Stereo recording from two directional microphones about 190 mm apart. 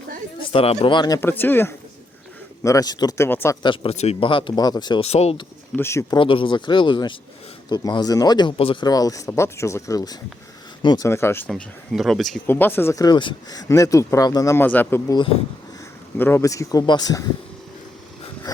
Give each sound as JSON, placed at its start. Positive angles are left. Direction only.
{"t": 0.5, "sound": "speech", "side_deg": 30}
{"t": 5.7, "sound": "speech", "side_deg": 15}
{"t": 11.4, "sound": "speech", "side_deg": 0}
{"t": 12.5, "sound": "speech", "side_deg": 10}
{"t": 18.5, "sound": "a sound", "side_deg": 20}